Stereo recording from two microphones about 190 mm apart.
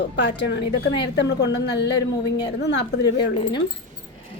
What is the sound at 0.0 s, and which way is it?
A woman's voice, 65° left (ahead or behind).